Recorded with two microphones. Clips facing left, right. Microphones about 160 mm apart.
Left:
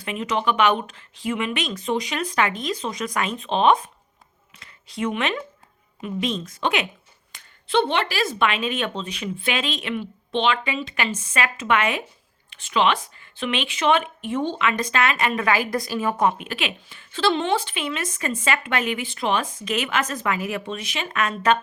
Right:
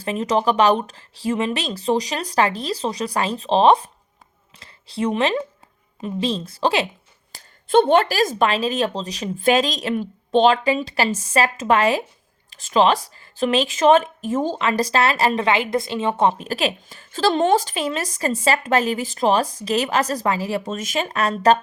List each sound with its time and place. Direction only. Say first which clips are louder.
0.0 s speech: right 4 dB; 40° right (ahead or behind)
7.3 s speech: right 5 dB; 45° right (ahead or behind)